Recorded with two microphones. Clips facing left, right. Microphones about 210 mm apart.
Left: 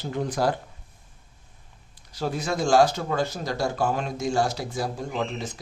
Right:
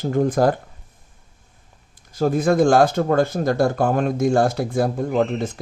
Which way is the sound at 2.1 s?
50° right (ahead or behind).